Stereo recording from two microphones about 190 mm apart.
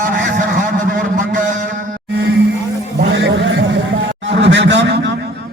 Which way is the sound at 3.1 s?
70° right (ahead or behind).